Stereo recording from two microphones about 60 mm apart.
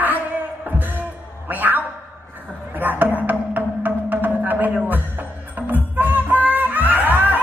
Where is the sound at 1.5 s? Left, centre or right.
Right.